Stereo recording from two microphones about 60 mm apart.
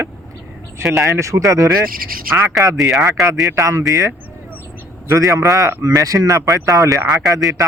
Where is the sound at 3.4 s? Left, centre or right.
Right.